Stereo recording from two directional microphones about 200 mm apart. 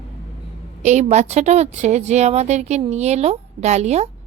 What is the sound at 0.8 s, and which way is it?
A woman's voice, 35° right (ahead or behind).